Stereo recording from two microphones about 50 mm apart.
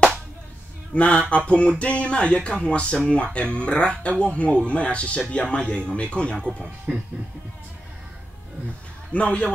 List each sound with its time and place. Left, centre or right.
0.9 s speech: left
9.1 s speech: left